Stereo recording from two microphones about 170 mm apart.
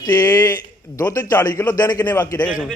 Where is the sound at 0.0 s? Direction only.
25° left (ahead or behind).